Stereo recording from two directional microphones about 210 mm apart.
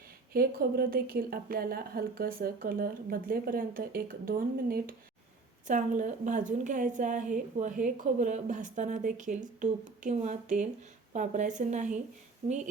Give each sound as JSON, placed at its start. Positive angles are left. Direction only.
{"t": 0.3, "sound": "a woman's voice", "side_deg": -45}